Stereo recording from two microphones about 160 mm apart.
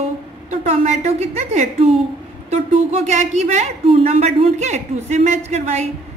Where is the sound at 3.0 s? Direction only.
45° right (ahead or behind).